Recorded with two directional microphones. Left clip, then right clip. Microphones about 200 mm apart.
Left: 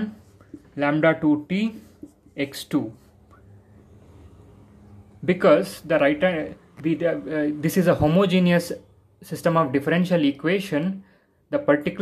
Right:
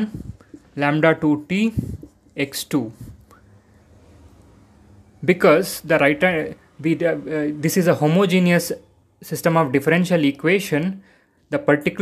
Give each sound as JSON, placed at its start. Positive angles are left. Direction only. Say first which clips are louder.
{"t": 0.7, "sound": "speech", "louder": "right 3 dB", "side_deg": -15}
{"t": 5.2, "sound": "speech", "louder": "right 3 dB", "side_deg": -20}